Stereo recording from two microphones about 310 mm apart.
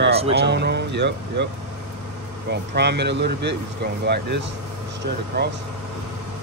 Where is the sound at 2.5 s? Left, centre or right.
Right.